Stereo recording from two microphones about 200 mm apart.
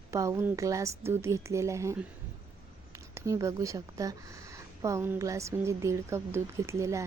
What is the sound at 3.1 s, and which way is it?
Speech, 15° right (ahead or behind).